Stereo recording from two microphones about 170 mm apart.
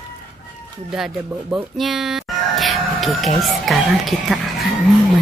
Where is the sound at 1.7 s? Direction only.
Centre (ahead or behind).